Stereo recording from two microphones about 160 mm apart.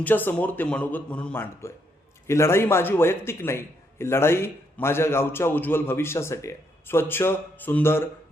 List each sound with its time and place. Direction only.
0.0 s a man's voice: 10° left (ahead or behind)